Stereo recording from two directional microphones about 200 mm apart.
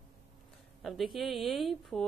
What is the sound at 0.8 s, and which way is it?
A woman's voice, centre (ahead or behind).